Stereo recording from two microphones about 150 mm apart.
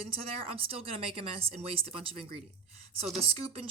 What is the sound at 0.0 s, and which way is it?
A woman's voice, 40° right (ahead or behind).